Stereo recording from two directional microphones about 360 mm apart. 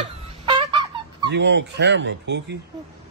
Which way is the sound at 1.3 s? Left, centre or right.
Right.